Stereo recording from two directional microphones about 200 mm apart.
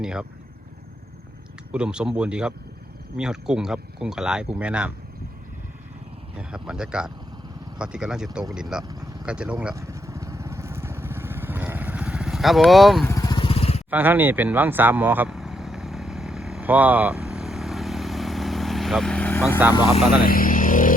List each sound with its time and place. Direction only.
0.0 s speech: 5° right (ahead or behind)
1.7 s speech: 5° right (ahead or behind)
6.3 s speech: 5° right (ahead or behind)
9.2 s vehicle: 5° right (ahead or behind)
13.1 s vehicle: 20° left (ahead or behind)
13.9 s vehicle: 10° right (ahead or behind); by 19.5 s 10° left (ahead or behind)
19.7 s speech: 25° left (ahead or behind)
20.2 s vehicle: 45° left (ahead or behind)